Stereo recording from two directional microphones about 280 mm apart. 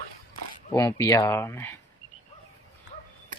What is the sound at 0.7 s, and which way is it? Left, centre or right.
Speech, centre.